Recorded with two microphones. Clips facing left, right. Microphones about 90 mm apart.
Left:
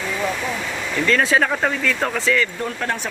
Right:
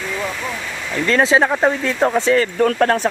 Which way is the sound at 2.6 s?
65° right (ahead or behind).